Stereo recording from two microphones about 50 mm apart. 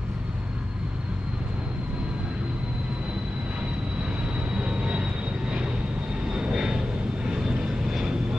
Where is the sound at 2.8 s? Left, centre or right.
Right.